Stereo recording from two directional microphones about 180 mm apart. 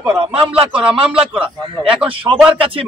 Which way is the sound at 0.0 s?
5° right (ahead or behind).